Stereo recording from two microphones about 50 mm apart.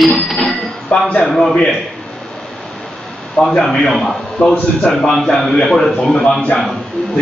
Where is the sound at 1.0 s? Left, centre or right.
Left.